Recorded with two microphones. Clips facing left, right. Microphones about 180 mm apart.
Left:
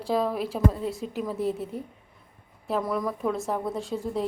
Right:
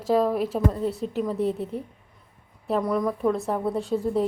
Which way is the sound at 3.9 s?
35° right (ahead or behind).